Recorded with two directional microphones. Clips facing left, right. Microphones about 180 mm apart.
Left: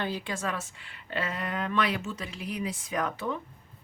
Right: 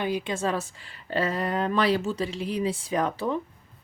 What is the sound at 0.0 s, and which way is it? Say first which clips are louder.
Speech: right 5 dB; 15° right (ahead or behind).